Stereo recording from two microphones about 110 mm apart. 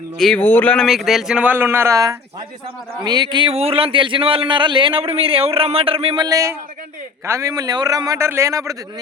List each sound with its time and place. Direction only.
0.3 s speech: 15° left (ahead or behind)
0.9 s speech: centre (ahead or behind)
1.6 s speech: 25° right (ahead or behind)
3.0 s a man's voice: 40° right (ahead or behind)
3.5 s speech: 65° right (ahead or behind)
6.1 s a man's voice: 35° right (ahead or behind)